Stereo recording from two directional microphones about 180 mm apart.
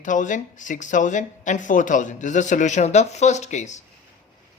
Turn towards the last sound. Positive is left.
turn(degrees=40)  # may be behind; listen again after turning